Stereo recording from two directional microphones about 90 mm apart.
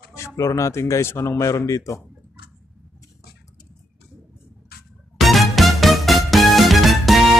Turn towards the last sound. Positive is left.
turn(degrees=0)  # may be behind; listen again after turning